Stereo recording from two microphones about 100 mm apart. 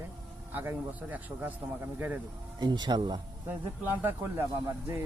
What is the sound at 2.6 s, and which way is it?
Speech, 45° right (ahead or behind).